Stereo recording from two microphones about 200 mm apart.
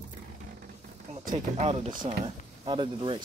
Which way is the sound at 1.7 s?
25° right (ahead or behind).